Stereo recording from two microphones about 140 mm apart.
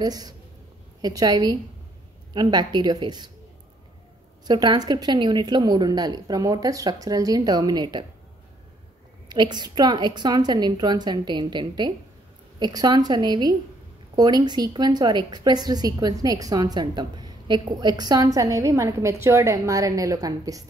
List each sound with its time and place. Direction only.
0.0 s a woman's voice: 30° right (ahead or behind)
4.5 s a woman's voice: 30° right (ahead or behind)
9.3 s a woman's voice: 30° right (ahead or behind)